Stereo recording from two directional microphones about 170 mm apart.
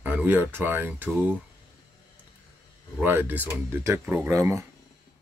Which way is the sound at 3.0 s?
10° right (ahead or behind).